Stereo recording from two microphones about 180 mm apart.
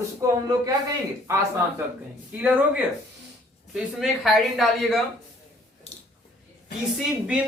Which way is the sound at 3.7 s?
Centre (ahead or behind).